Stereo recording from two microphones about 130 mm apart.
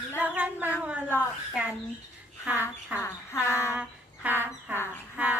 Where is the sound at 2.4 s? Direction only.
10° right (ahead or behind).